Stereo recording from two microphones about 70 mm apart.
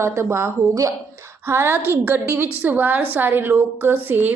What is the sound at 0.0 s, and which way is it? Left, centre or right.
Speech, right.